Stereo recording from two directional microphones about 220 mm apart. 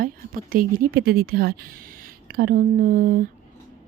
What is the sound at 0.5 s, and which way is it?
Speech, 40° right (ahead or behind).